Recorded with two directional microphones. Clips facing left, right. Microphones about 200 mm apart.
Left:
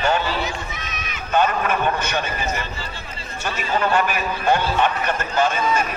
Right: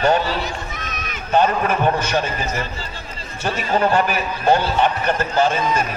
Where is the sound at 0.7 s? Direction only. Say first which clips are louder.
Right 2 dB; 50° right (ahead or behind).